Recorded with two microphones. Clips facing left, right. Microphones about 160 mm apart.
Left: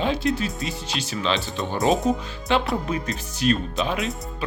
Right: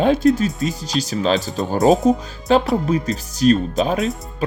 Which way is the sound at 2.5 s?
40° right (ahead or behind).